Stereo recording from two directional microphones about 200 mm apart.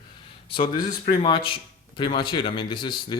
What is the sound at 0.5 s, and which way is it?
A man's voice, 25° left (ahead or behind).